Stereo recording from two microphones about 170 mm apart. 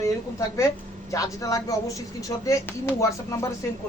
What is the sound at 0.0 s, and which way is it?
Speech, 15° left (ahead or behind).